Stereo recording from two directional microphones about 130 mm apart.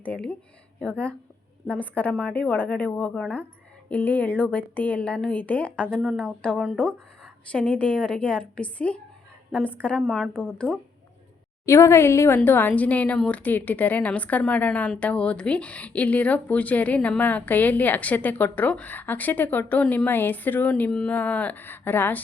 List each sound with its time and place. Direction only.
0.0 s a woman's voice: 10° left (ahead or behind)
11.6 s a woman's voice: 20° left (ahead or behind)